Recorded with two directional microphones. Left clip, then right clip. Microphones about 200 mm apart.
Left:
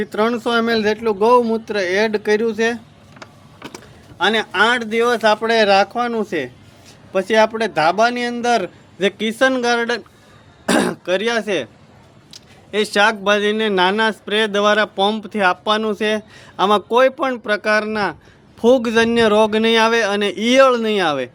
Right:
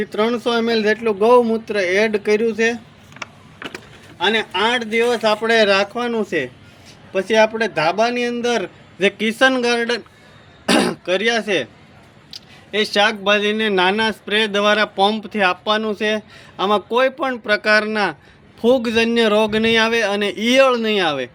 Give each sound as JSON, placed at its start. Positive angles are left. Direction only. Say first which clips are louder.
{"t": 0.0, "sound": "speech", "louder": "even", "side_deg": 5}
{"t": 4.2, "sound": "speech", "louder": "left 2 dB", "side_deg": 15}
{"t": 7.1, "sound": "speech", "louder": "even", "side_deg": 10}
{"t": 9.0, "sound": "speech", "louder": "right 1 dB", "side_deg": 0}